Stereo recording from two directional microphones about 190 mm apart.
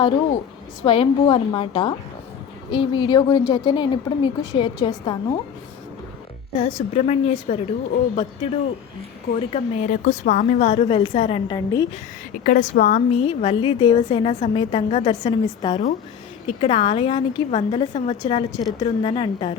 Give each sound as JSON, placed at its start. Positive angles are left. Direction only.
{"t": 0.8, "sound": "a woman's voice", "side_deg": 25}
{"t": 6.6, "sound": "a woman's voice", "side_deg": 25}
{"t": 12.4, "sound": "a woman's voice", "side_deg": 45}
{"t": 13.2, "sound": "a woman's voice", "side_deg": 30}
{"t": 15.2, "sound": "a woman's voice", "side_deg": 25}